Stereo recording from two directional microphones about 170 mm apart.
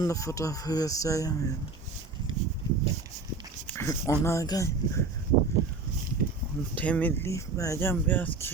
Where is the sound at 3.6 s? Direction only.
15° left (ahead or behind).